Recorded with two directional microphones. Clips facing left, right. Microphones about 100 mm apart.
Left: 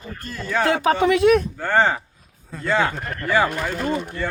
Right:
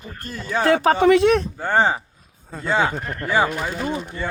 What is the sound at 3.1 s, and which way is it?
Speech, 5° right (ahead or behind).